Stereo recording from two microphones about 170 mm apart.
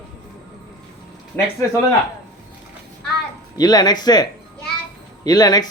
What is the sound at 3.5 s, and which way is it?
Speech, 25° left (ahead or behind).